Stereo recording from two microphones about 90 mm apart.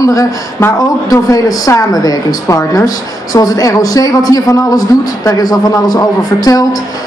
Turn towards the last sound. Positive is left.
turn(degrees=45)  # may be behind; listen again after turning